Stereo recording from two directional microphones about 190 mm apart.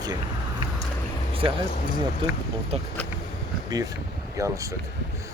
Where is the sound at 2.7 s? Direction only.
35° right (ahead or behind).